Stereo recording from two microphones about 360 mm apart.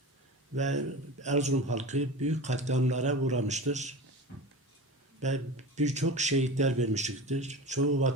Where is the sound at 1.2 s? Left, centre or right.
Centre.